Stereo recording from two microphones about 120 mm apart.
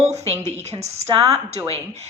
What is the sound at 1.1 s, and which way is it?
Speech, 55° right (ahead or behind).